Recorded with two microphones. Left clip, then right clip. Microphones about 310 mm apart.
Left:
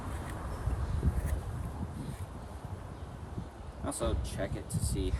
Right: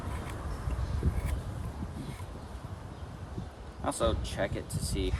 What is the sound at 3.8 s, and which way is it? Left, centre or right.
Speech, centre.